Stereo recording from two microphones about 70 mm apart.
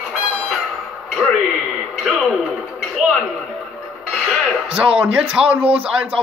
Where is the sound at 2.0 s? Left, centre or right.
Centre.